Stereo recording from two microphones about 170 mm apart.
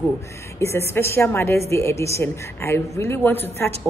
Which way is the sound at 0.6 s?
15° left (ahead or behind).